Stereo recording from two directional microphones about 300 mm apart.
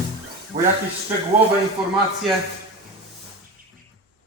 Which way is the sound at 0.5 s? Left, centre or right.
Right.